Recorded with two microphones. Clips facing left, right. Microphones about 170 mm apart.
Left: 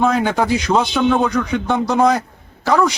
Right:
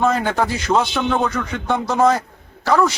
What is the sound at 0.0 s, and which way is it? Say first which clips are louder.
A man's voice: left 2 dB; centre (ahead or behind).